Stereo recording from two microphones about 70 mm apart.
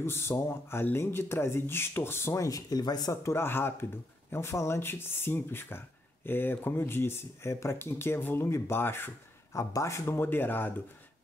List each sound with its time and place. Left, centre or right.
0.0 s speech: left
2.3 s speech: left
3.1 s speech: left
9.5 s speech: left